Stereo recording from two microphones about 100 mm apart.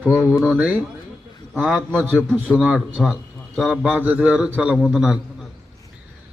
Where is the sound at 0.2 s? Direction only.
25° left (ahead or behind).